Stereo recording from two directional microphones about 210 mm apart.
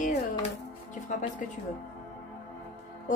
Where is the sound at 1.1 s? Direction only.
35° left (ahead or behind).